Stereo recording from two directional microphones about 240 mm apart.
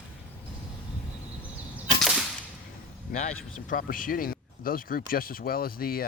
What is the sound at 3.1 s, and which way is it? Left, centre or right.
Speech, left.